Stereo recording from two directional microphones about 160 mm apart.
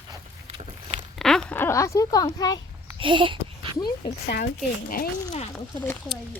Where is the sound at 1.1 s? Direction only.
5° left (ahead or behind); by 2.6 s 25° left (ahead or behind).